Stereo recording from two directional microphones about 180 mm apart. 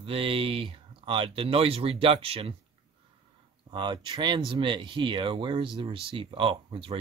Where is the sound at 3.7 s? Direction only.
25° right (ahead or behind).